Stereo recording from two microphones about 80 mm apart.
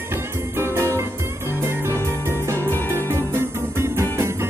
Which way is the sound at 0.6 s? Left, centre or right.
Right.